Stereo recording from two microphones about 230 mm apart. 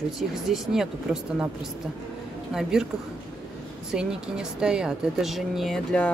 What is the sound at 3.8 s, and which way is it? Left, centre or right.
Speech, centre.